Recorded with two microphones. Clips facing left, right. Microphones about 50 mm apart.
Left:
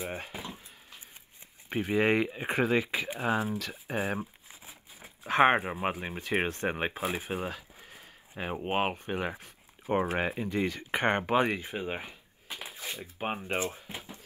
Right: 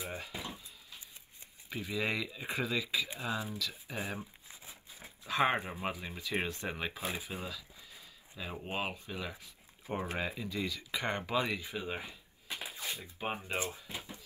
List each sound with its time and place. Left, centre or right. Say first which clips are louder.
0.0 s a sound: left 4 dB; left
1.7 s speech: left 9 dB; left
4.5 s crumpling: left 2 dB; left
5.2 s speech: left 7 dB; left